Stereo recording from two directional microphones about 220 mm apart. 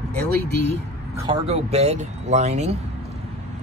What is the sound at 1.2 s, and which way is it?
Speech, 30° right (ahead or behind).